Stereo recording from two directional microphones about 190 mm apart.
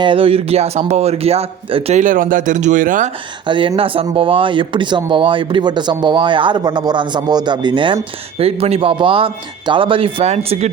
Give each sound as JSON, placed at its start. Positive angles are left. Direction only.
{"t": 0.0, "sound": "a man's voice", "side_deg": -30}
{"t": 3.4, "sound": "speech", "side_deg": -25}